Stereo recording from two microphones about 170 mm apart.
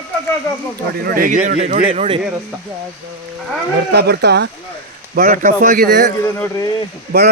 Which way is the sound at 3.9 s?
70° right (ahead or behind).